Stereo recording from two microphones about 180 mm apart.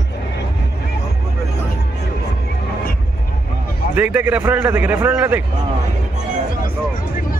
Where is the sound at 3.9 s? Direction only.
10° right (ahead or behind).